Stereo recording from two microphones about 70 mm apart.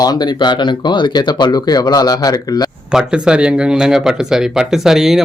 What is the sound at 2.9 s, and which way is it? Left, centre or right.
Speech, centre.